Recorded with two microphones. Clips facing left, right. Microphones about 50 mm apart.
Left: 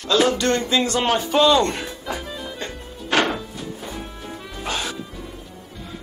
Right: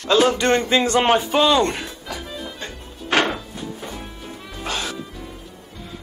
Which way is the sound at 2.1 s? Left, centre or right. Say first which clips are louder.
Left 4 dB; left.